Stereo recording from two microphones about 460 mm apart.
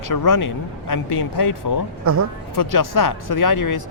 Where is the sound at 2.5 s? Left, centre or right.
Left.